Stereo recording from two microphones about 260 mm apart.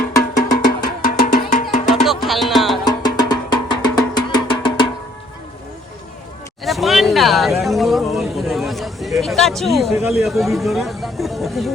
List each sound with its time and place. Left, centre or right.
1.0 s music: left
2.0 s music: centre
2.8 s music: centre
6.7 s a sound: centre
10.0 s speech: centre